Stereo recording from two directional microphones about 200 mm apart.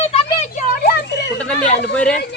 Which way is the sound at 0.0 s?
30° left (ahead or behind).